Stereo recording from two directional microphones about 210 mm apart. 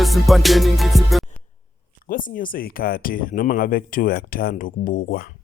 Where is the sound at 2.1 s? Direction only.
40° left (ahead or behind).